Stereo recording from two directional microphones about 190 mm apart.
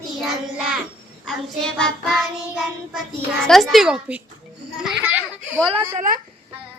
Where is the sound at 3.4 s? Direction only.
Centre (ahead or behind).